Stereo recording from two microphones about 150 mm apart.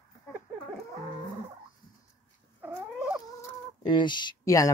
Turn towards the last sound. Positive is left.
turn(degrees=20)  # may be behind; listen again after turning